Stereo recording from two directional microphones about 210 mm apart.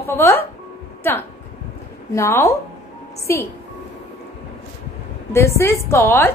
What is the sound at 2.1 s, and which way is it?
A woman's voice, 15° left (ahead or behind).